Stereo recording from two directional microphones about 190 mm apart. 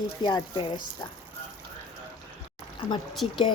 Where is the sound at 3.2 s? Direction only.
30° left (ahead or behind).